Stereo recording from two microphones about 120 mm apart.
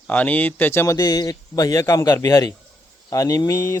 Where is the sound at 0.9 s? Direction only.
35° left (ahead or behind).